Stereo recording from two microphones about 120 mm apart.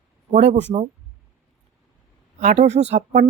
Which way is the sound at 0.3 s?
75° right (ahead or behind).